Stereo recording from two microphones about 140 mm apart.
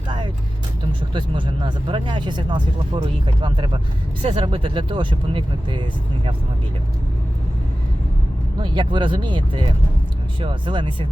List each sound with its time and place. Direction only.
1.1 s speech: 35° right (ahead or behind)
8.6 s speech: 35° right (ahead or behind)